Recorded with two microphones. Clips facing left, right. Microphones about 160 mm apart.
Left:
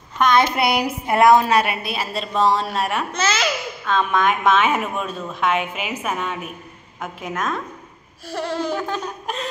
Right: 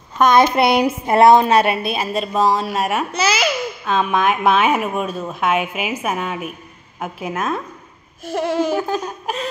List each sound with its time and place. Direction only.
0.2 s a woman's voice: 45° right (ahead or behind)
1.1 s a woman's voice: 25° right (ahead or behind); by 3.1 s 10° right (ahead or behind)
3.2 s babbling: 10° right (ahead or behind)
4.5 s a woman's voice: 10° right (ahead or behind)